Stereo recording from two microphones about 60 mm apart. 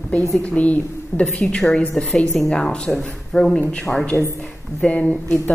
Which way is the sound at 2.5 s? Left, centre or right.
Centre.